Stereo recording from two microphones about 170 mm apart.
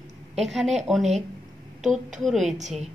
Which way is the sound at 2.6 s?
40° right (ahead or behind).